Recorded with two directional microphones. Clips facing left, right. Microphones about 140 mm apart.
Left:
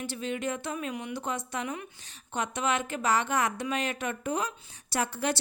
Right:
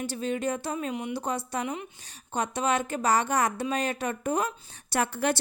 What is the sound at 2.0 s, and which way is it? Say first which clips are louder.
Speech: right 3 dB; 35° right (ahead or behind).